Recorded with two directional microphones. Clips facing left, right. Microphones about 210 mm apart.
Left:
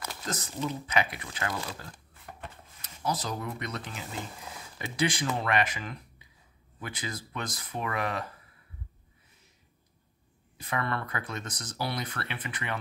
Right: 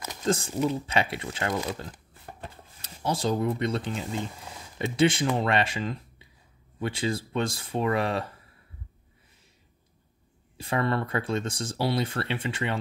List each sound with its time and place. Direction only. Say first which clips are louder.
0.0 s a sound: right 10 dB; 25° right (ahead or behind)
0.7 s speech: right 2 dB; 30° right (ahead or behind)
10.6 s speech: right 6 dB; 30° right (ahead or behind)